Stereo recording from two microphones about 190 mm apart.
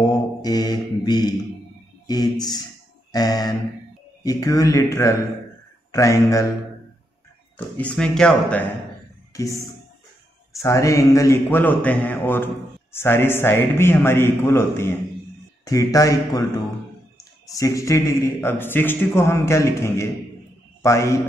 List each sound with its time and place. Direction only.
0.4 s mantra: 20° left (ahead or behind)
2.0 s a man's voice: 20° left (ahead or behind)
7.5 s a man's voice: 10° left (ahead or behind)
10.6 s a man's voice: 15° left (ahead or behind)
17.5 s a man's voice: 20° left (ahead or behind)